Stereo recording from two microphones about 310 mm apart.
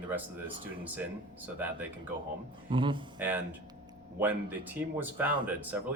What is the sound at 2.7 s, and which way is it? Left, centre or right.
Speech, centre.